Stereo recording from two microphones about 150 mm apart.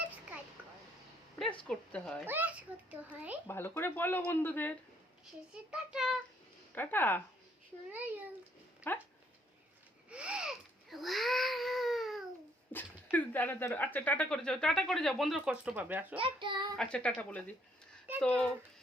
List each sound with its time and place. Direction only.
1.6 s speech: 5° left (ahead or behind)
2.2 s a child's voice: 10° right (ahead or behind)
3.4 s speech: 15° left (ahead or behind)
5.7 s speech: 5° right (ahead or behind)
6.7 s speech: 15° left (ahead or behind)
8.9 s speech: 15° left (ahead or behind)
10.1 s baby cry: 5° right (ahead or behind)
12.7 s speech: 10° left (ahead or behind); by 16.1 s 10° right (ahead or behind)
16.1 s a child's voice: 35° right (ahead or behind)
16.7 s speech: 5° left (ahead or behind)